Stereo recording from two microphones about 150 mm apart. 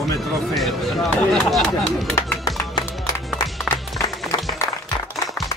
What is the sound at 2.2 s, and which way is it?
Music, 20° left (ahead or behind).